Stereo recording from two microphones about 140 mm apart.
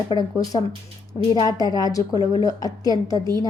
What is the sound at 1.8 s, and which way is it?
A woman's voice, 25° left (ahead or behind).